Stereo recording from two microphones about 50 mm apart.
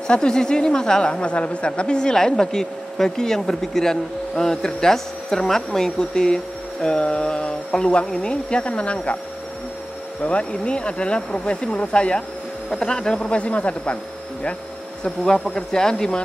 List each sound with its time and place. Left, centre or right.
0.1 s a woman's voice: centre
10.2 s speech: left
15.0 s a woman's voice: centre